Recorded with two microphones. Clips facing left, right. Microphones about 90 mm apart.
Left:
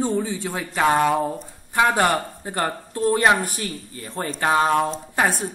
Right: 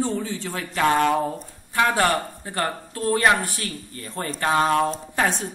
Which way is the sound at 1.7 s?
15° left (ahead or behind).